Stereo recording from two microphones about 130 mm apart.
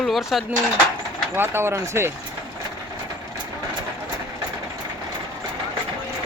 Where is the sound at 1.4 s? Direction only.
20° right (ahead or behind).